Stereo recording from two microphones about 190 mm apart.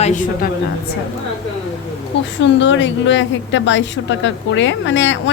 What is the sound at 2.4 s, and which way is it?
A woman's voice, 75° left (ahead or behind).